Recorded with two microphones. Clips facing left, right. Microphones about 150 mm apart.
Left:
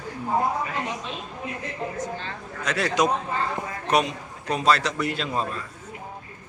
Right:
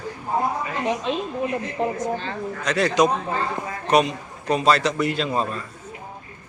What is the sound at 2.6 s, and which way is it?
A man's voice, 5° left (ahead or behind).